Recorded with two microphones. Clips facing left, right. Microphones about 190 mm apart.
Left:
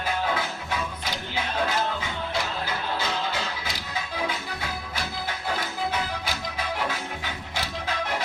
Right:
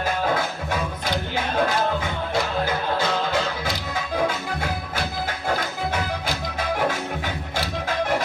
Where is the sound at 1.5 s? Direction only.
50° right (ahead or behind).